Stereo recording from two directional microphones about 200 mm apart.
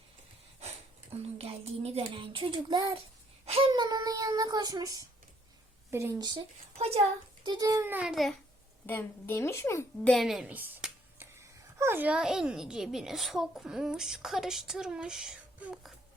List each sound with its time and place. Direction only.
1.1 s a child's voice: 30° right (ahead or behind)
6.7 s a child's voice: 30° right (ahead or behind)
7.4 s a child's voice: 20° right (ahead or behind); by 8.4 s centre (ahead or behind)
8.9 s a woman's voice: 10° left (ahead or behind)